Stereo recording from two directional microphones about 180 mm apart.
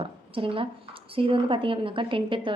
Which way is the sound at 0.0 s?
30° right (ahead or behind).